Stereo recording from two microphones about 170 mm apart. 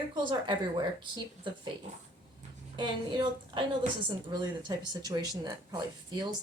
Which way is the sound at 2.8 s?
25° right (ahead or behind).